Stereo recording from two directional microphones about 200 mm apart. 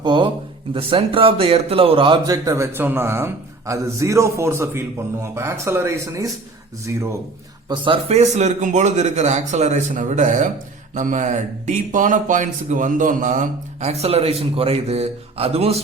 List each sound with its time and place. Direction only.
0.0 s speech: 20° right (ahead or behind)
7.7 s speech: 30° right (ahead or behind)